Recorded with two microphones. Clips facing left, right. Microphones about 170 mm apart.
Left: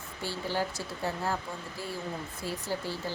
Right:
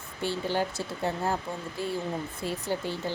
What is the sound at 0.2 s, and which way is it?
Speech, 20° right (ahead or behind).